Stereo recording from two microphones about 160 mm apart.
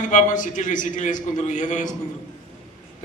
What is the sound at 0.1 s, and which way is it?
A man's voice, 55° left (ahead or behind).